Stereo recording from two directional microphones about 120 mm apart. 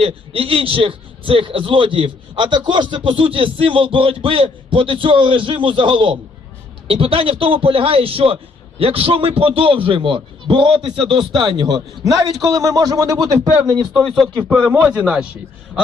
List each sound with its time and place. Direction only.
0.0 s a man's voice: 50° right (ahead or behind); by 13.3 s 30° right (ahead or behind)
14.4 s a man's voice: 10° right (ahead or behind)